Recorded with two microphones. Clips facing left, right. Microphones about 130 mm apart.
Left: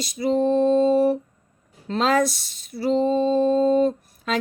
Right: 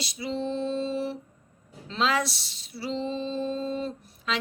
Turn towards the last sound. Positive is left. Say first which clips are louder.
# left 7 dB
turn(degrees=50)  # may be behind; listen again after turning